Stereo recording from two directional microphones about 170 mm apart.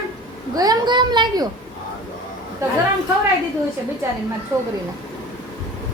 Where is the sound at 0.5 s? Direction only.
20° right (ahead or behind).